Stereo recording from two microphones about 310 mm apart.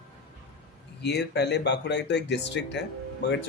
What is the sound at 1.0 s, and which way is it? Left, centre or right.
Speech, left.